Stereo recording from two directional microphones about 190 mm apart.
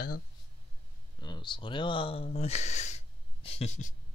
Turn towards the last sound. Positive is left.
turn(degrees=40)  # may be behind; listen again after turning